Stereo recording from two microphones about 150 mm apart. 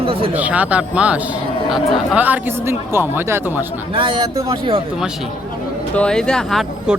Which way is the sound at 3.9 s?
35° right (ahead or behind).